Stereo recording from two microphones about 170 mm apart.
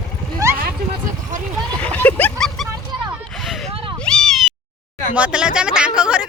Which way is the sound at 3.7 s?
35° right (ahead or behind).